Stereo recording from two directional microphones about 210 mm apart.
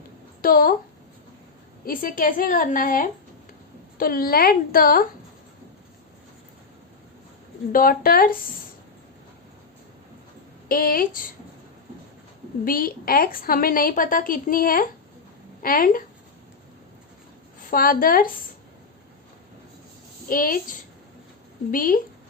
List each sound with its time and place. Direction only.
0.4 s a woman's voice: 45° left (ahead or behind)
1.8 s a woman's voice: 40° left (ahead or behind)
7.7 s a woman's voice: 45° left (ahead or behind)
10.7 s a woman's voice: 45° left (ahead or behind)
12.6 s a woman's voice: 45° left (ahead or behind)
17.6 s a woman's voice: 40° left (ahead or behind)
20.2 s a woman's voice: 40° left (ahead or behind)